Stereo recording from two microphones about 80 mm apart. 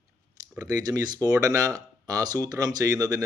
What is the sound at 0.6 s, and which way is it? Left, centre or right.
A man's voice, right.